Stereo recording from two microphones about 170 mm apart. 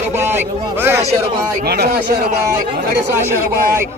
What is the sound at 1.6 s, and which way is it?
Speech, 65° right (ahead or behind).